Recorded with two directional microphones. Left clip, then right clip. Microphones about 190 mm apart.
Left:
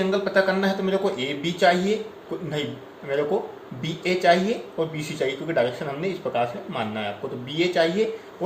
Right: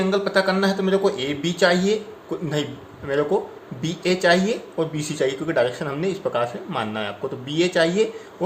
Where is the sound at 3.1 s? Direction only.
50° right (ahead or behind).